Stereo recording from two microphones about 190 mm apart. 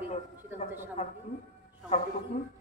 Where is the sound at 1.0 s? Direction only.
35° left (ahead or behind).